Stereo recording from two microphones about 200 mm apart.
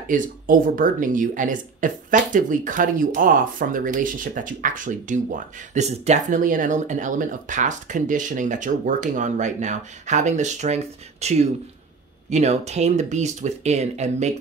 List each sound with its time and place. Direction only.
0.1 s speech: 40° right (ahead or behind)